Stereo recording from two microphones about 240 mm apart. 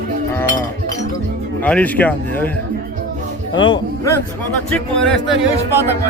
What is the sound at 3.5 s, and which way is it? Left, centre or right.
A man's voice, centre.